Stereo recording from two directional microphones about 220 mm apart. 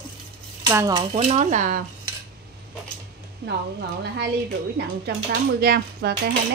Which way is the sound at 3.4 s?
45° right (ahead or behind).